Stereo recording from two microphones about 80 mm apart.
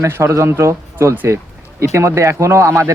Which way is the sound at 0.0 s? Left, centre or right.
Right.